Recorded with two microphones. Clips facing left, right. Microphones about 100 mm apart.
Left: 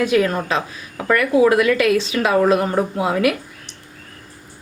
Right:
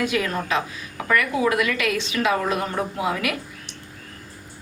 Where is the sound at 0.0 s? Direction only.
35° left (ahead or behind).